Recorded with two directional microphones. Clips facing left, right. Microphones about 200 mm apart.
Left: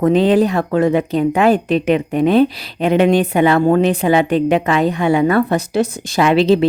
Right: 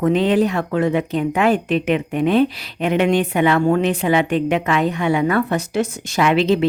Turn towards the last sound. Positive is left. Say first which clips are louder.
# left 4 dB
turn(degrees=35)  # may be behind; listen again after turning